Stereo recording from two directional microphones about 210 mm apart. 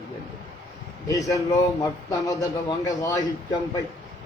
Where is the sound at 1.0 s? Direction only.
15° left (ahead or behind).